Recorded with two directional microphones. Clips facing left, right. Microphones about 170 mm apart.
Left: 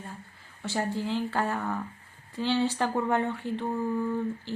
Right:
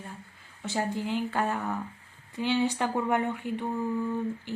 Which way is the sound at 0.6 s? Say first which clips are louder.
Even; 20° right (ahead or behind).